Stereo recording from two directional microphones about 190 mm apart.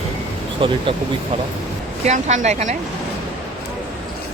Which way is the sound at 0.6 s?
30° right (ahead or behind).